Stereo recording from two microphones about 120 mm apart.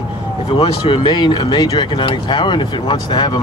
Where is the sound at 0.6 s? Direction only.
45° left (ahead or behind).